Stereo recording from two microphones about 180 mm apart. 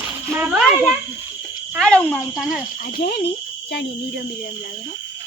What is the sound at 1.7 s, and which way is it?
Speech, 5° left (ahead or behind).